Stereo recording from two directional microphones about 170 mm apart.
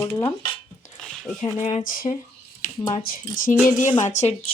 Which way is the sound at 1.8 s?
55° left (ahead or behind).